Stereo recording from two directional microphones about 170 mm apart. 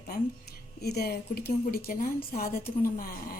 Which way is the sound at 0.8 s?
70° left (ahead or behind).